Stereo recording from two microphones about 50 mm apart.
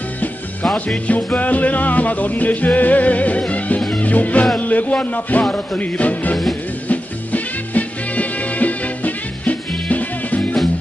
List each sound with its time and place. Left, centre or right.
0.7 s music: left